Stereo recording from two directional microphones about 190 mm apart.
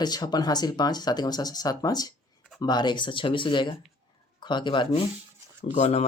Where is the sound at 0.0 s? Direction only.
20° left (ahead or behind).